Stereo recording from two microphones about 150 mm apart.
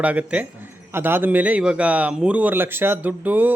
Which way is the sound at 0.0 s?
10° right (ahead or behind).